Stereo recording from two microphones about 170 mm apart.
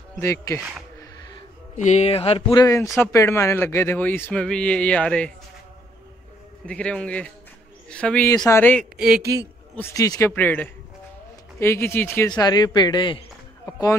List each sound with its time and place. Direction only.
0.2 s speech: 15° left (ahead or behind)
1.8 s speech: 45° left (ahead or behind)
2.5 s a man's voice: 20° left (ahead or behind)
6.6 s speech: 5° left (ahead or behind)
8.9 s a man's voice: 5° right (ahead or behind)
9.8 s a man's voice: 15° left (ahead or behind)
10.3 s speech: 10° left (ahead or behind)
12.3 s a man's voice: 25° left (ahead or behind)